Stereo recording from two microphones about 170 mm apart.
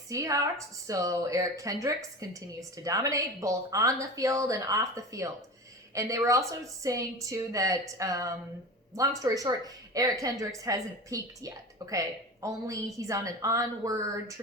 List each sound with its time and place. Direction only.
0.1 s a woman's voice: 20° right (ahead or behind)